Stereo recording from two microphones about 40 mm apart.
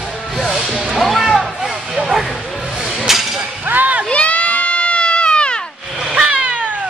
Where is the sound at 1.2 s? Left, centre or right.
Centre.